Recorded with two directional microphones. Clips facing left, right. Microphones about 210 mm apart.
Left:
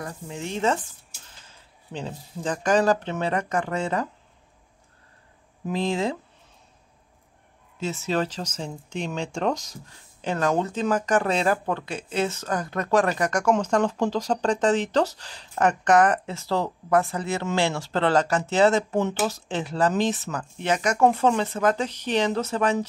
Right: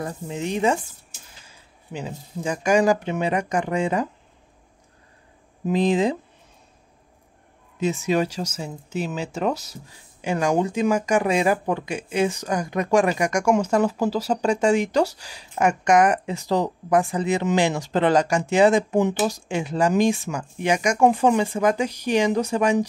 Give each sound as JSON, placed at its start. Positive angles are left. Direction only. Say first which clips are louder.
{"t": 0.0, "sound": "speech", "louder": "right 5 dB", "side_deg": -20}
{"t": 5.7, "sound": "speech", "louder": "right 5 dB", "side_deg": -20}
{"t": 7.8, "sound": "speech", "louder": "right 4 dB", "side_deg": -15}